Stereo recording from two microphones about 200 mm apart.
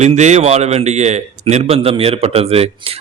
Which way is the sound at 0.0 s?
35° right (ahead or behind).